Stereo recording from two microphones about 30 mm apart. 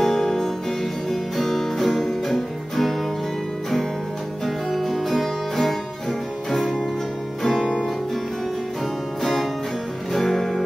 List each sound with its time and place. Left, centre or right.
0.0 s music: centre
4.7 s music: centre
7.4 s music: centre
9.2 s music: centre